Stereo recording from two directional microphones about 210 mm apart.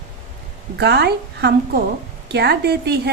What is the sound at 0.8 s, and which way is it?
A woman's voice, 50° right (ahead or behind).